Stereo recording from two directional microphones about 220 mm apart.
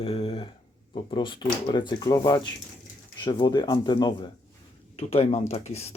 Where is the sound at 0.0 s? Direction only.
25° left (ahead or behind).